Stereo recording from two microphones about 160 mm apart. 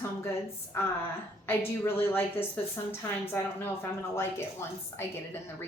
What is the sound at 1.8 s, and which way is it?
A woman's voice, 15° left (ahead or behind).